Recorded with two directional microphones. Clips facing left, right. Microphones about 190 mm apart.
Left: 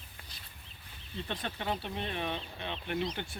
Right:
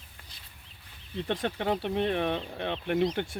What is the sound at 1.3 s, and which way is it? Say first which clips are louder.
Speech: right 7 dB; 70° right (ahead or behind).